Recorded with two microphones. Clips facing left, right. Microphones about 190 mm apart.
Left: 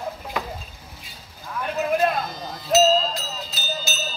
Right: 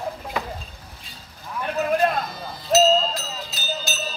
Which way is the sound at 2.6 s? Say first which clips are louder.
Even; centre (ahead or behind).